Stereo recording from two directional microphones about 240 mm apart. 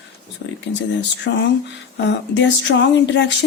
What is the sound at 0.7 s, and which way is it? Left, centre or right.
A woman's voice, left.